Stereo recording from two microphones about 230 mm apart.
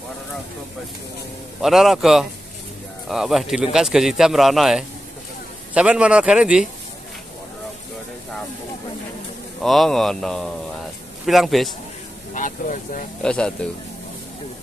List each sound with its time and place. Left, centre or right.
1.6 s speech: centre
9.6 s speech: centre
12.4 s speech: left
13.2 s speech: centre